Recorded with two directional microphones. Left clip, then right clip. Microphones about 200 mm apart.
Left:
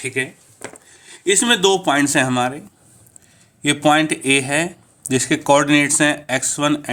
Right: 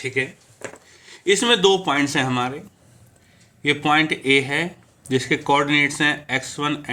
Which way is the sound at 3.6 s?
45° left (ahead or behind).